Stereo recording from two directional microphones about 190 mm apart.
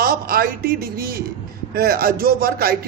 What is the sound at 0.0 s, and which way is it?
A woman's voice, 50° right (ahead or behind).